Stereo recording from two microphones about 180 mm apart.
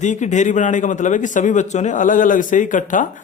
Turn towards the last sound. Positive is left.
turn(degrees=45)  # may be behind; listen again after turning